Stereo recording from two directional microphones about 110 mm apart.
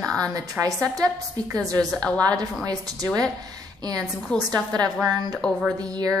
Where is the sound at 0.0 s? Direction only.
5° left (ahead or behind).